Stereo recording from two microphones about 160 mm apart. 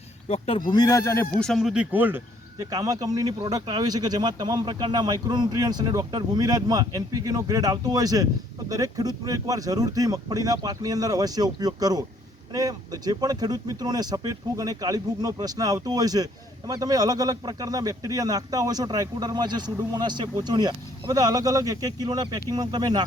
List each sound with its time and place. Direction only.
0.3 s speech: 35° left (ahead or behind)
0.7 s speech: 25° left (ahead or behind)
1.4 s speech: centre (ahead or behind); by 23.0 s 25° right (ahead or behind)